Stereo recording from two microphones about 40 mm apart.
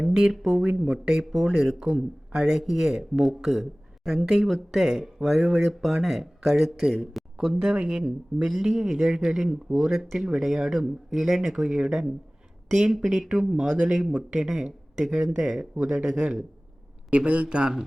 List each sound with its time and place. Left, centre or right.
0.0 s speech: centre
1.2 s speech: centre
1.8 s speech: centre
15.8 s speech: right
17.2 s speech: right